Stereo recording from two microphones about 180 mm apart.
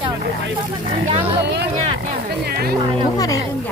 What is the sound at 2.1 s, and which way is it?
Music, 60° right (ahead or behind).